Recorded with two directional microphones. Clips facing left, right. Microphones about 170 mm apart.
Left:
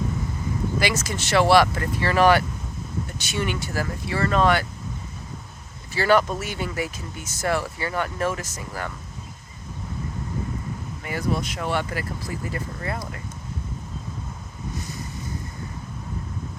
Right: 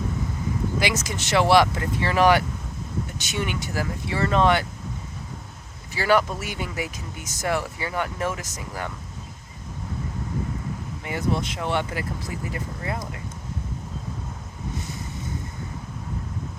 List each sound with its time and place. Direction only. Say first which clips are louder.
0.8 s speech: left 1 dB; 20° right (ahead or behind)
5.9 s speech: left 2 dB; 10° right (ahead or behind)
11.0 s speech: even; 20° right (ahead or behind)
14.8 s waves: left 2 dB; 25° right (ahead or behind)